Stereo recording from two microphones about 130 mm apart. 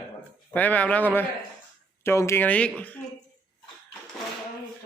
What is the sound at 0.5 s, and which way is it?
Speech, 10° left (ahead or behind).